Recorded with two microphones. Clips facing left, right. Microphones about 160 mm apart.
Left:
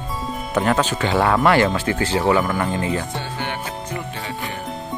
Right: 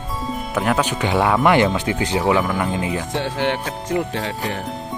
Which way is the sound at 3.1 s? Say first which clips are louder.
Right 6 dB; 80° right.